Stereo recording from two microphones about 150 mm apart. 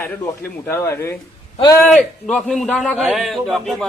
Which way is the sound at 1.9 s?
5° left (ahead or behind).